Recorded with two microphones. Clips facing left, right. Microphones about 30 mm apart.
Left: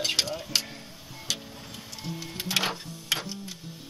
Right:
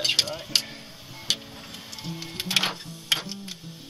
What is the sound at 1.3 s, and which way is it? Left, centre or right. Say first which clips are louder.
Music: right 5 dB; right.